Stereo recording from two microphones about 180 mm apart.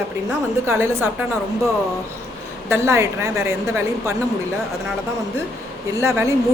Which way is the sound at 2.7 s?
15° right (ahead or behind).